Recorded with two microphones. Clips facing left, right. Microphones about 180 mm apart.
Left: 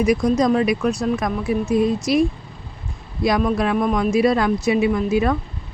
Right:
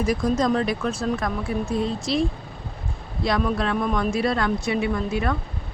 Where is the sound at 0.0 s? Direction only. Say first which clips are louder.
Left 5 dB; 15° left (ahead or behind).